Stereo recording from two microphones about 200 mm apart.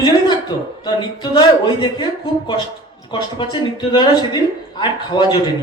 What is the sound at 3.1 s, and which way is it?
A woman's voice, 25° left (ahead or behind).